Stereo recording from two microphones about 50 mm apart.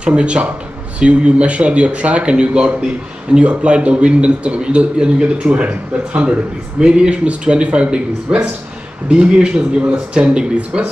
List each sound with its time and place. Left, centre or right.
0.0 s a man's voice: right